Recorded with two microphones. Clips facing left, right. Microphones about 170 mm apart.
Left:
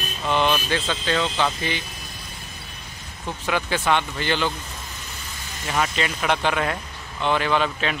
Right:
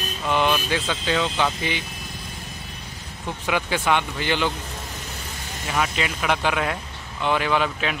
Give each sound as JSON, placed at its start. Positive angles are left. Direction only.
{"t": 0.2, "sound": "speech", "side_deg": -10}
{"t": 3.4, "sound": "speech", "side_deg": -10}
{"t": 5.7, "sound": "speech", "side_deg": -5}